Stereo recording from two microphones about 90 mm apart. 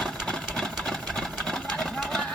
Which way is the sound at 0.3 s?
5° left (ahead or behind).